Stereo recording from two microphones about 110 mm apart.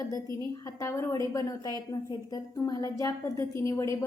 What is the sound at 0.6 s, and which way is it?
A woman's voice, 25° left (ahead or behind).